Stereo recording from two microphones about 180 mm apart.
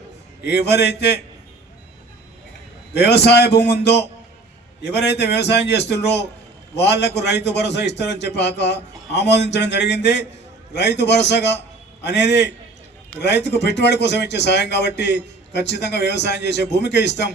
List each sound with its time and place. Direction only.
0.4 s a man's voice: 65° left (ahead or behind)
2.9 s speech: 65° left (ahead or behind)